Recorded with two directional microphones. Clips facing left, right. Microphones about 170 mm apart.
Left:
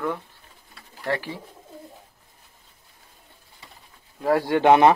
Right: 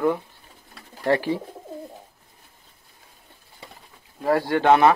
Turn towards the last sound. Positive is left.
turn(degrees=15)  # may be behind; listen again after turning